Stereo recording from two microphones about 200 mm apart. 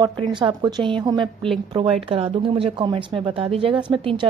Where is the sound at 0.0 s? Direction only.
20° right (ahead or behind).